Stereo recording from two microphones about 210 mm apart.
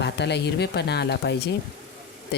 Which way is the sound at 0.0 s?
55° left (ahead or behind).